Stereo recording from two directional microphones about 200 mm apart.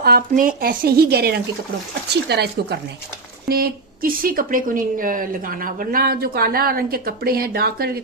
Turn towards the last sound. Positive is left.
turn(degrees=-50)  # may be behind; listen again after turning